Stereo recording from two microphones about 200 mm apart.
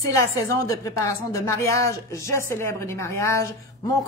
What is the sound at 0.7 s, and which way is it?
Speech, 15° left (ahead or behind).